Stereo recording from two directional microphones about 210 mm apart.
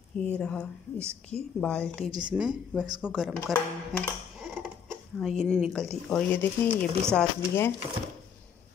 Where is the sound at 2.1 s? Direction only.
20° right (ahead or behind).